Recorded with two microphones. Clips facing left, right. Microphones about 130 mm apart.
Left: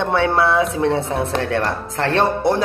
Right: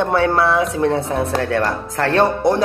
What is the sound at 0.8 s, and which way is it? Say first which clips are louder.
Speech: right 1 dB; 50° right (ahead or behind).